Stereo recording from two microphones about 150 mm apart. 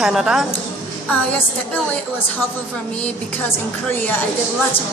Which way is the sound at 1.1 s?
10° left (ahead or behind).